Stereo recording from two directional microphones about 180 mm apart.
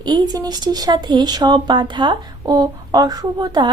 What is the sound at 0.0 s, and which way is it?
Speech, 20° right (ahead or behind).